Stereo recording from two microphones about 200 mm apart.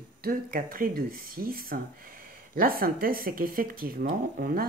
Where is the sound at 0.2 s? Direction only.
45° right (ahead or behind).